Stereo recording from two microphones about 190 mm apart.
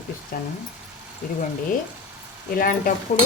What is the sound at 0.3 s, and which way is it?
Speech, 50° left (ahead or behind).